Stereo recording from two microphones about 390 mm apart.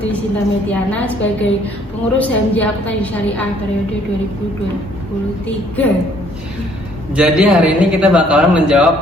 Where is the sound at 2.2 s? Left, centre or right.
Centre.